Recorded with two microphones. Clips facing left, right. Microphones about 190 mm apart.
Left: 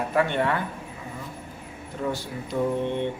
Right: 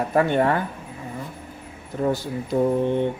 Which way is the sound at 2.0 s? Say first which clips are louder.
Right 6 dB; 45° right (ahead or behind).